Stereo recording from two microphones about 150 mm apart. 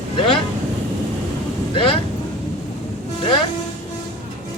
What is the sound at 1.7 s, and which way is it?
Speech, 35° left (ahead or behind).